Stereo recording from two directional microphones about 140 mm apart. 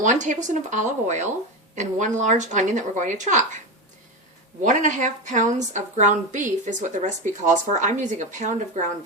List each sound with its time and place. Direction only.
0.0 s a woman's voice: 60° right (ahead or behind)
4.6 s a woman's voice: 65° right (ahead or behind)